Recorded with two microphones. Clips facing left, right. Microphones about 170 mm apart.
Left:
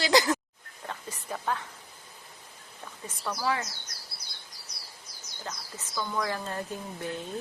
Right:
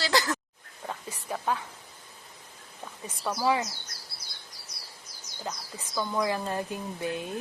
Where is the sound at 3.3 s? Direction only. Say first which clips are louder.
Right 4 dB; 15° right (ahead or behind).